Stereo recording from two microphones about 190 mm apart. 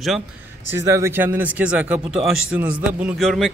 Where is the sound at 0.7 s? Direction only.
15° right (ahead or behind).